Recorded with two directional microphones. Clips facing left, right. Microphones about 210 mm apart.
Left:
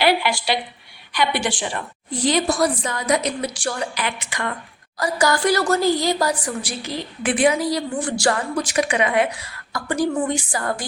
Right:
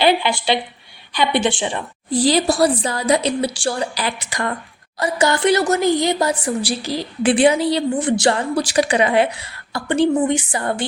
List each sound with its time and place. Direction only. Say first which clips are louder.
0.0 s a woman's voice: right 3 dB; 20° right (ahead or behind)
2.0 s a woman's voice: right 4 dB; 35° right (ahead or behind)
4.9 s a woman's voice: right 2 dB; 25° right (ahead or behind)